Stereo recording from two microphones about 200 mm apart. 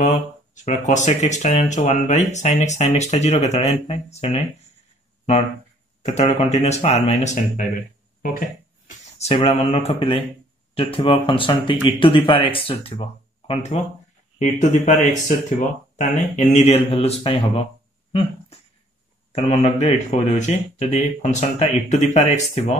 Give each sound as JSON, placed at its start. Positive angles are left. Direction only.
{"t": 0.0, "sound": "speech", "side_deg": 35}
{"t": 6.0, "sound": "speech", "side_deg": 35}
{"t": 8.8, "sound": "speech", "side_deg": 30}
{"t": 19.3, "sound": "speech", "side_deg": 35}